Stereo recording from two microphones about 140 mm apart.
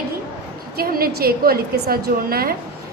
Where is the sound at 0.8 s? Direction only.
90° right.